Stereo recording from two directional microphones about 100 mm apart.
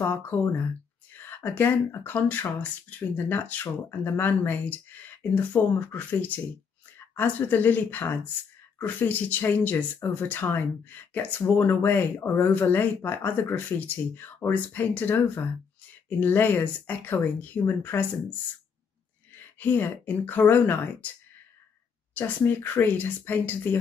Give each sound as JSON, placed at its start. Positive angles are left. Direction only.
{"t": 0.0, "sound": "speech", "side_deg": 20}
{"t": 19.6, "sound": "speech", "side_deg": 20}
{"t": 22.1, "sound": "speech", "side_deg": 20}